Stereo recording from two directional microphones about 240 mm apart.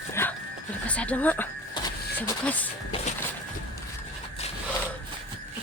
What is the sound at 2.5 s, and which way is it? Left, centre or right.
Speech, centre.